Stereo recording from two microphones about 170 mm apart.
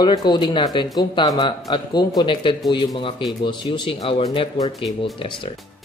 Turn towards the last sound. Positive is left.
turn(degrees=0)  # may be behind; listen again after turning